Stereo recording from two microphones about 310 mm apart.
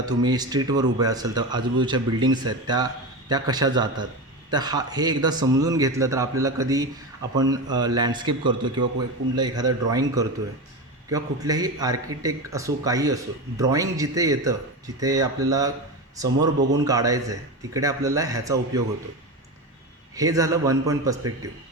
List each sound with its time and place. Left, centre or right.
0.0 s speech: centre
20.1 s speech: centre